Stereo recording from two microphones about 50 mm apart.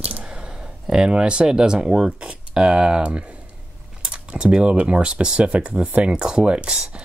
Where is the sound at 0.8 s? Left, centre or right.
Centre.